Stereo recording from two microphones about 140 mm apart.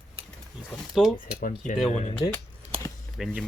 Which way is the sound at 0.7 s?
Centre (ahead or behind).